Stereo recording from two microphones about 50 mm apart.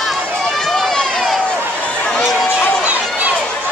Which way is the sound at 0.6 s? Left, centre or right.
Centre.